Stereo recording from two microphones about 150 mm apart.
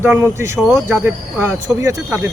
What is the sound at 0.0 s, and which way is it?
Speech, 10° right (ahead or behind).